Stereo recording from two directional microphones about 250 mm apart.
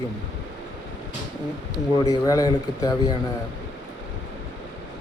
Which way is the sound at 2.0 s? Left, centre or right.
Centre.